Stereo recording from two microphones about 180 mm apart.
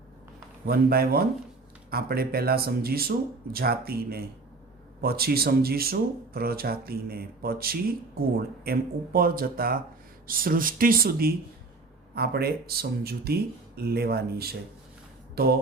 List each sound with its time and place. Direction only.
0.7 s speech: 60° right (ahead or behind)